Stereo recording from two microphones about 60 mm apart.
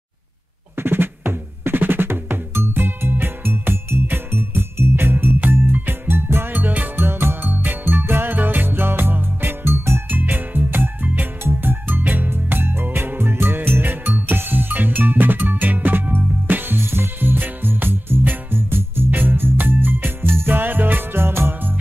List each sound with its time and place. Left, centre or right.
0.7 s music: right